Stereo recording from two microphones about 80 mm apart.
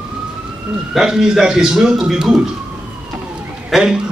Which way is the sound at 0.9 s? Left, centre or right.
Centre.